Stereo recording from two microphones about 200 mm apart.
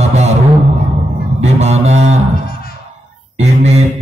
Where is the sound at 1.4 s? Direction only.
35° right (ahead or behind).